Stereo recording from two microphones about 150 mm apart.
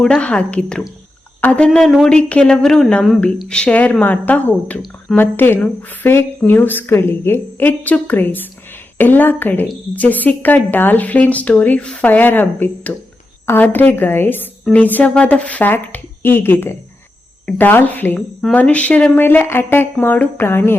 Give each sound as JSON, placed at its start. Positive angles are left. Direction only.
{"t": 0.0, "sound": "a woman's voice", "side_deg": 5}